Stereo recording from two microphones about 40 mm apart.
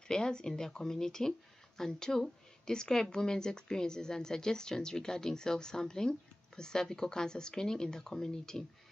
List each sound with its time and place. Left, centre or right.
0.1 s a woman's voice: centre